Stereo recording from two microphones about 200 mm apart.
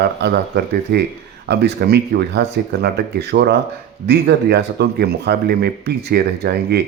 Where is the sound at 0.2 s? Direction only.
60° right (ahead or behind).